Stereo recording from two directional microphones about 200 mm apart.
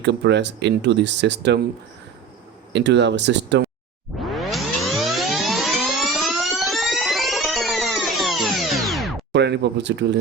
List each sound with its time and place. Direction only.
0.0 s speech: 60° right (ahead or behind)
2.7 s speech: 60° right (ahead or behind)
4.2 s music: centre (ahead or behind)
9.3 s speech: 60° right (ahead or behind)